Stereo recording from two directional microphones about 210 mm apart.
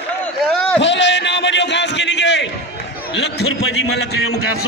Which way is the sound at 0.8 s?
55° left (ahead or behind).